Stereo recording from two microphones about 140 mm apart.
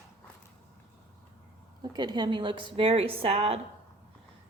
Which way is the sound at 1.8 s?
30° right (ahead or behind).